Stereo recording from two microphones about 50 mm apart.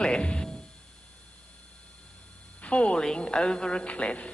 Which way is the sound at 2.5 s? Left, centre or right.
Left.